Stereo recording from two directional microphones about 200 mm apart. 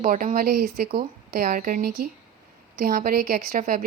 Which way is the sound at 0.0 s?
40° right (ahead or behind).